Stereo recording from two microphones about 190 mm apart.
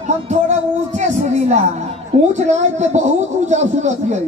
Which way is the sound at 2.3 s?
35° right (ahead or behind).